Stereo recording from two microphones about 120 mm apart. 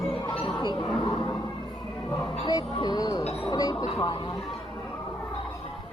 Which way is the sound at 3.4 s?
30° left (ahead or behind).